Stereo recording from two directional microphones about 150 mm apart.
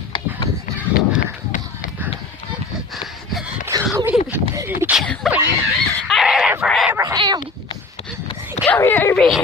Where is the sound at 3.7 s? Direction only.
25° right (ahead or behind).